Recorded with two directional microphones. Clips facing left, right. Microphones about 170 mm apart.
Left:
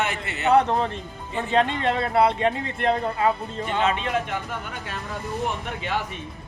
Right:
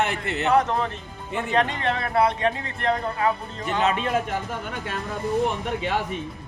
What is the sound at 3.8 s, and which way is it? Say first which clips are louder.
Speech: right 1 dB; 40° right (ahead or behind).